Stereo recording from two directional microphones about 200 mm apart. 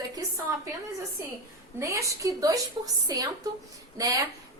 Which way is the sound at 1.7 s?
15° right (ahead or behind).